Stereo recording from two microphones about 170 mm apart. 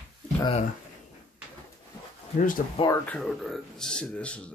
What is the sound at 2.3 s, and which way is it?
Speech, 55° left (ahead or behind).